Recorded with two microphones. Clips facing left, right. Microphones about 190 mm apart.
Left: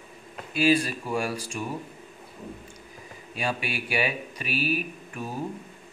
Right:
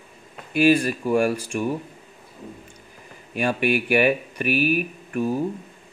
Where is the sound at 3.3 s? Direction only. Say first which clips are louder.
Right 9 dB; 55° right (ahead or behind).